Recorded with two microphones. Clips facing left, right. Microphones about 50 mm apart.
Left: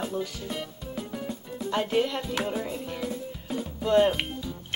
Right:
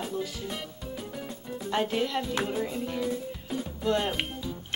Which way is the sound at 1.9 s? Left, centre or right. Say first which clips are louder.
Left 3 dB; centre.